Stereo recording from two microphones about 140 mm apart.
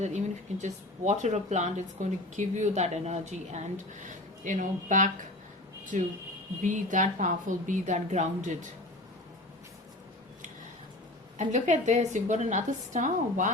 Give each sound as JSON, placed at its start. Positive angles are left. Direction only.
{"t": 0.6, "sound": "a woman's voice", "side_deg": -55}
{"t": 11.3, "sound": "a woman's voice", "side_deg": -60}